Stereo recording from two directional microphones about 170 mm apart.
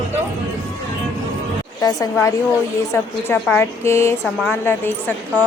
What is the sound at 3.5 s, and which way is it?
A woman's voice, 15° left (ahead or behind).